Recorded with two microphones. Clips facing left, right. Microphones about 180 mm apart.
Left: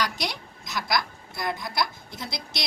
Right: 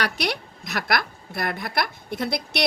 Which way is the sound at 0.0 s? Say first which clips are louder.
Right 3 dB; 65° right (ahead or behind).